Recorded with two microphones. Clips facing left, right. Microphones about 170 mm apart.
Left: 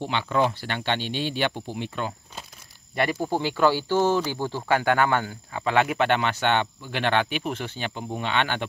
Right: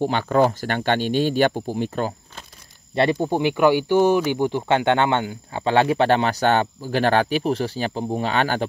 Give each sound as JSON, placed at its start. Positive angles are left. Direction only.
{"t": 0.0, "sound": "speech", "side_deg": -45}
{"t": 2.9, "sound": "speech", "side_deg": -25}